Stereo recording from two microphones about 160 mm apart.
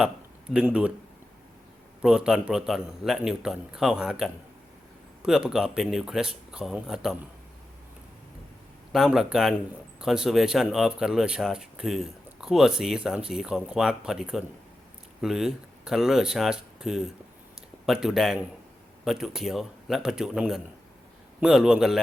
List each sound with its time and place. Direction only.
0.5 s speech: 5° right (ahead or behind)
2.0 s speech: 5° right (ahead or behind)
8.9 s speech: 5° right (ahead or behind)